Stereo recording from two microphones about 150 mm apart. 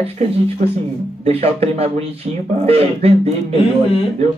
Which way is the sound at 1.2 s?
40° right (ahead or behind).